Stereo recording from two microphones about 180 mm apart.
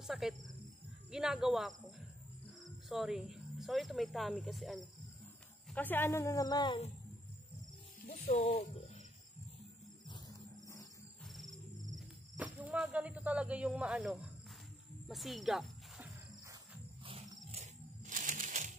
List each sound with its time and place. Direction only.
0.0 s a woman's voice: centre (ahead or behind); by 6.8 s 25° left (ahead or behind)
8.3 s speech: 35° left (ahead or behind)
10.0 s a sound: 25° left (ahead or behind)
11.9 s speech: 5° right (ahead or behind)
15.0 s snake: centre (ahead or behind)
17.0 s wild animals: 30° right (ahead or behind)